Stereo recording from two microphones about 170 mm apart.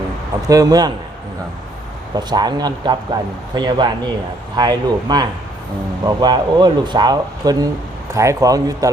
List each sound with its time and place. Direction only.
0.4 s speech: 20° right (ahead or behind)
2.1 s speech: 25° right (ahead or behind)